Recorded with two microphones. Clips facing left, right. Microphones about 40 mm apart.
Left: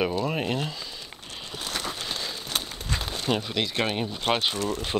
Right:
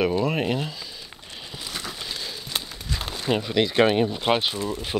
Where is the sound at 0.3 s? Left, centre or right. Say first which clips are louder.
Right 3 dB; centre.